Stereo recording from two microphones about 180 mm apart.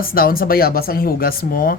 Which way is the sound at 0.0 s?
55° left (ahead or behind).